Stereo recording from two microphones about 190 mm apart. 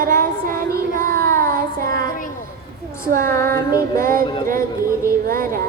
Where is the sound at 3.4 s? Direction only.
15° left (ahead or behind).